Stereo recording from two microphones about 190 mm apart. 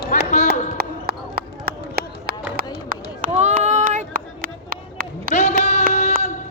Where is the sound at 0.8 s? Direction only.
55° right (ahead or behind).